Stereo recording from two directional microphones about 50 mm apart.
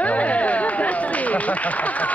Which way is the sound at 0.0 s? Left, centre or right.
Left.